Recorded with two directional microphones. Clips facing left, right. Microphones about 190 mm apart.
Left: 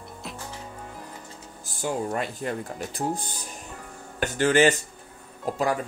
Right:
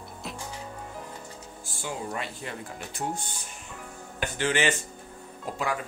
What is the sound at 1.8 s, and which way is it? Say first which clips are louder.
Speech: left 6 dB; 45° left (ahead or behind).